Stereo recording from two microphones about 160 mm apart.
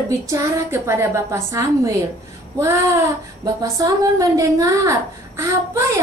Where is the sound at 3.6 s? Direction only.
20° right (ahead or behind).